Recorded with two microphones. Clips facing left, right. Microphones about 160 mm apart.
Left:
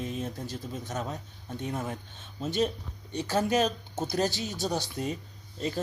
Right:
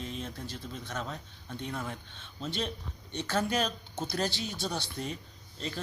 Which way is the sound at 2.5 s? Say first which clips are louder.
Left 7 dB; 45° left (ahead or behind).